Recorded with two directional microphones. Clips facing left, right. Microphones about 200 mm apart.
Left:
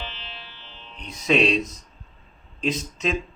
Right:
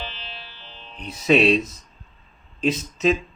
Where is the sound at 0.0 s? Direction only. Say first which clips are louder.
Right 2 dB; 35° right (ahead or behind).